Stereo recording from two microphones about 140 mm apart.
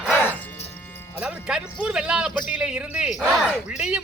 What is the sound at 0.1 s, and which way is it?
Music, 15° left (ahead or behind).